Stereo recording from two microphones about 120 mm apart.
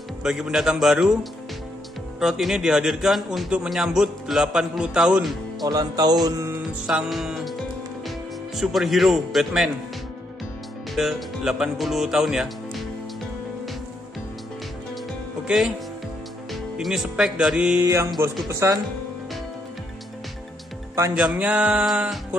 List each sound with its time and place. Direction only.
0.2 s a man's voice: 5° right (ahead or behind)
2.1 s a man's voice: centre (ahead or behind)
5.7 s music: 30° right (ahead or behind)
6.9 s music: 5° right (ahead or behind)
8.5 s a man's voice: centre (ahead or behind)
11.0 s a man's voice: centre (ahead or behind)
15.4 s speech: 5° right (ahead or behind)
16.5 s music: 5° right (ahead or behind)
18.5 s speech: 25° right (ahead or behind)
21.1 s speech: 5° right (ahead or behind)